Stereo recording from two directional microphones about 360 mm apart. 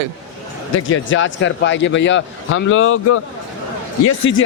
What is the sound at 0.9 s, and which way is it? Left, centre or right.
Speech, left.